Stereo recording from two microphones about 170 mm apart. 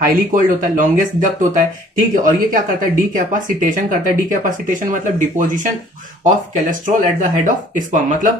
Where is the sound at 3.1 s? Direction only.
50° right (ahead or behind).